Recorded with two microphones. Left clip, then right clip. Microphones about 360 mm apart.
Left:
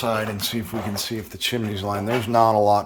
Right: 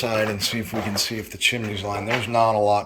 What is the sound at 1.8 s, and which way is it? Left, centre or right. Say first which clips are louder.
Speech: left 1 dB; centre.